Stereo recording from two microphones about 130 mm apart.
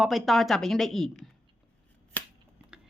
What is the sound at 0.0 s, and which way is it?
A woman's voice, centre (ahead or behind).